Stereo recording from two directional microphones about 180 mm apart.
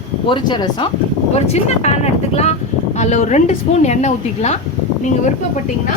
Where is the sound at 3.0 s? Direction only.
40° left (ahead or behind).